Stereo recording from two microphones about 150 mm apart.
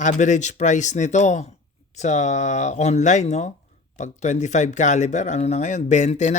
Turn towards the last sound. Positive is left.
turn(degrees=50)  # may be behind; listen again after turning